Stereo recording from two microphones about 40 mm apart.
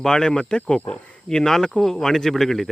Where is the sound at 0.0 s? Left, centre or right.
Centre.